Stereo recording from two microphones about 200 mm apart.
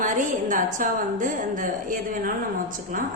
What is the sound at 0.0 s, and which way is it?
A woman's voice, 40° right (ahead or behind).